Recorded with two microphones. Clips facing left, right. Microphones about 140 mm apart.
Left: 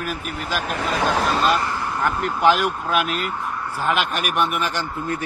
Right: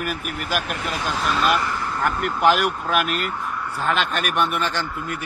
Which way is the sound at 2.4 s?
Centre (ahead or behind).